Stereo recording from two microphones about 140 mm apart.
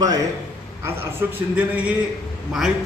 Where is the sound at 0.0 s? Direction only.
25° right (ahead or behind).